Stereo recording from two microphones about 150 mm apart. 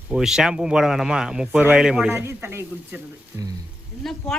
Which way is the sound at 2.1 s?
15° right (ahead or behind).